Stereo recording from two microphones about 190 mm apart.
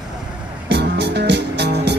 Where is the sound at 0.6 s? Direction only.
60° right (ahead or behind).